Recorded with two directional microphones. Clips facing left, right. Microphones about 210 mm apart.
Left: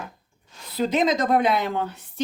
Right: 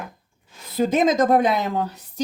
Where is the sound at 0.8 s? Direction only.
50° right (ahead or behind).